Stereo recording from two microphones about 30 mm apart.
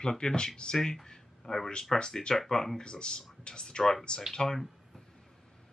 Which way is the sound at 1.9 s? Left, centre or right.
Centre.